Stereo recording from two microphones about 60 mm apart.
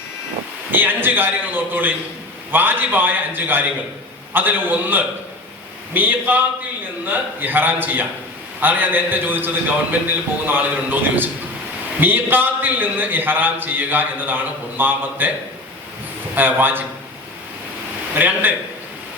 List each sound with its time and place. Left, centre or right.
0.7 s a man's voice: right
16.3 s a man's voice: right
18.1 s a man's voice: right